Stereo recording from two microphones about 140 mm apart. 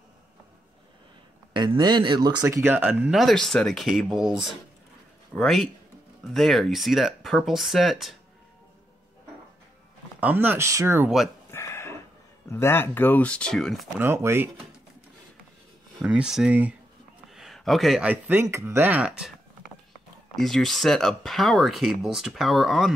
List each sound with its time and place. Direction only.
1.5 s speech: 35° right (ahead or behind); by 3.1 s 15° right (ahead or behind)
3.1 s speech: centre (ahead or behind)
10.2 s speech: 15° right (ahead or behind)
11.5 s a sound: 20° left (ahead or behind)
12.4 s speech: 15° left (ahead or behind)
13.9 s speech: 20° right (ahead or behind)
16.0 s speech: 5° right (ahead or behind)
17.3 s a sound: centre (ahead or behind)
18.0 s speech: 10° right (ahead or behind)
20.3 s speech: centre (ahead or behind)